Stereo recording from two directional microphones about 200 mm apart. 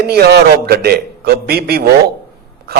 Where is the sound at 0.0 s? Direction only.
55° right (ahead or behind).